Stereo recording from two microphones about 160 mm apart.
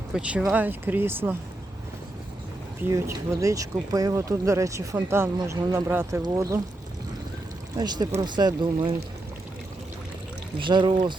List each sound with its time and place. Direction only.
0.1 s speech: 5° right (ahead or behind)
2.8 s speech: 15° right (ahead or behind)
7.8 s speech: 25° right (ahead or behind)
10.6 s speech: 30° right (ahead or behind)